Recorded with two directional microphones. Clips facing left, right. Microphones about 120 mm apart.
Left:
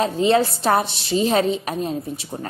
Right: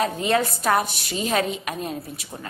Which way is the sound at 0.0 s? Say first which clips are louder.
Left 4 dB; 30° left (ahead or behind).